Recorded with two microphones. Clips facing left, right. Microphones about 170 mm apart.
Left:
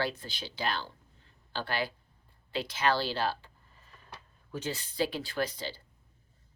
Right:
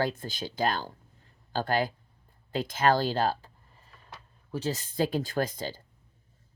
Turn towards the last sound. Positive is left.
turn(degrees=-45)  # may be behind; listen again after turning